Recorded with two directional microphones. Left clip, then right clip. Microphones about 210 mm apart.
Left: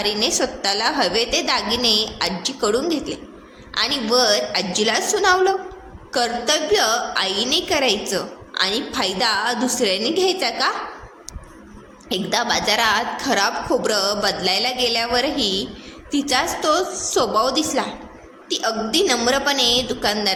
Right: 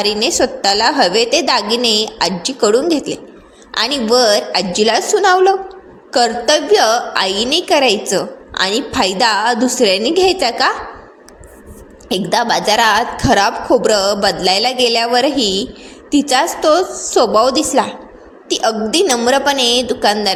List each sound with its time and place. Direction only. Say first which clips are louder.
0.0 s a woman's voice: right 6 dB; 30° right (ahead or behind)
12.0 s a woman's voice: right 6 dB; 25° right (ahead or behind)